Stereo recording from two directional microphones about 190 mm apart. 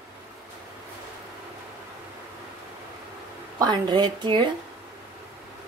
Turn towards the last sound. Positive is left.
turn(degrees=-25)  # may be behind; listen again after turning